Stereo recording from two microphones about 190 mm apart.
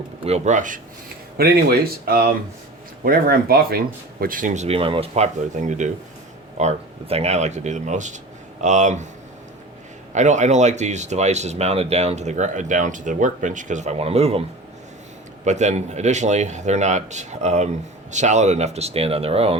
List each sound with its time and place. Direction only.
0.3 s speech: 35° right (ahead or behind)
1.4 s speech: 55° right (ahead or behind)
10.1 s speech: 40° right (ahead or behind)
15.4 s speech: 40° right (ahead or behind)